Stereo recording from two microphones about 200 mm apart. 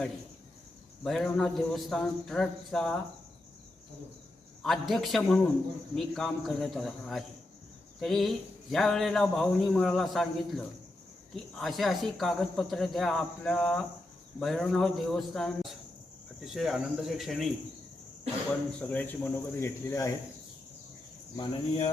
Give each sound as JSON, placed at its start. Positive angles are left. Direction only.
{"t": 1.0, "sound": "speech", "side_deg": 0}
{"t": 4.6, "sound": "speech", "side_deg": 0}
{"t": 18.8, "sound": "speech", "side_deg": 10}
{"t": 21.3, "sound": "speech", "side_deg": 25}